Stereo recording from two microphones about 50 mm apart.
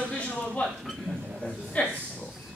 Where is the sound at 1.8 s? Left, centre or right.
Left.